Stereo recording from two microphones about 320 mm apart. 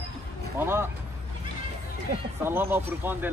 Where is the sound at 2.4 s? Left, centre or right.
Centre.